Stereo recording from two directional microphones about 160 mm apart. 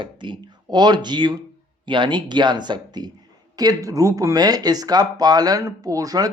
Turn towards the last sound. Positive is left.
turn(degrees=-20)  # may be behind; listen again after turning